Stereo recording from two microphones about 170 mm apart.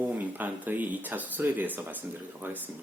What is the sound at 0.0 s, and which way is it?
Speech, 10° right (ahead or behind).